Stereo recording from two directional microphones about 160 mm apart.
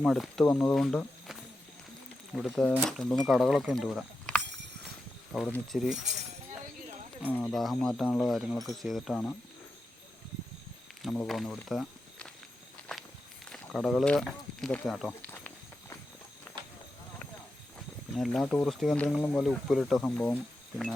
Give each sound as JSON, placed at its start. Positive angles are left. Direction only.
{"t": 0.0, "sound": "speech", "side_deg": 0}
{"t": 6.1, "sound": "speech", "side_deg": -45}
{"t": 7.2, "sound": "speech", "side_deg": 10}
{"t": 11.1, "sound": "speech", "side_deg": 10}
{"t": 12.9, "sound": "walk", "side_deg": 5}
{"t": 15.3, "sound": "walk", "side_deg": 15}
{"t": 18.1, "sound": "speech", "side_deg": 0}